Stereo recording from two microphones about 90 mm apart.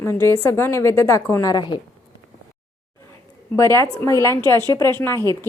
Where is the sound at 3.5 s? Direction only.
35° left (ahead or behind).